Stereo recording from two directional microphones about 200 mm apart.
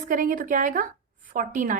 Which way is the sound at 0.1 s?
40° right (ahead or behind).